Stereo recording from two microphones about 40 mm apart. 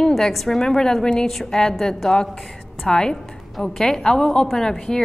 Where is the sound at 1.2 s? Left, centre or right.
Centre.